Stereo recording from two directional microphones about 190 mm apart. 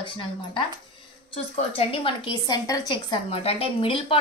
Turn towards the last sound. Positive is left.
turn(degrees=30)  # may be behind; listen again after turning